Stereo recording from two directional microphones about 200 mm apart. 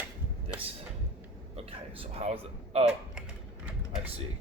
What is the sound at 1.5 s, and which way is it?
Speech, 30° right (ahead or behind).